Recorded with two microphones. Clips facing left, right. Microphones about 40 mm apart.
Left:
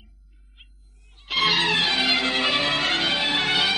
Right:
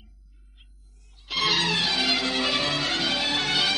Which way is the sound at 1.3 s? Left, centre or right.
Left.